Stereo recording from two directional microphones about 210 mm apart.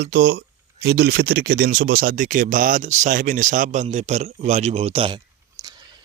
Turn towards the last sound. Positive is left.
turn(degrees=-20)  # may be behind; listen again after turning